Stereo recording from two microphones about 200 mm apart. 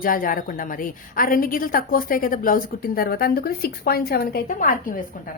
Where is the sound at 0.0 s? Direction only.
45° left (ahead or behind).